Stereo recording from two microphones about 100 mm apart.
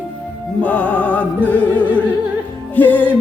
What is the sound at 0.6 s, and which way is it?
Music, 15° left (ahead or behind).